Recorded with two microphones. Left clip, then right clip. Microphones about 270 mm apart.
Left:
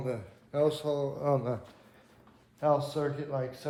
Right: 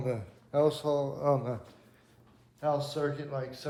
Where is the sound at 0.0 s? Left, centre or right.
Right; by 1.5 s centre.